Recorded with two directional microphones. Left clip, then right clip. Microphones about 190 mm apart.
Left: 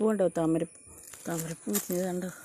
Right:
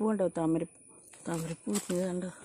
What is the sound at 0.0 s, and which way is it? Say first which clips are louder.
Speech: left 4 dB; 5° left (ahead or behind).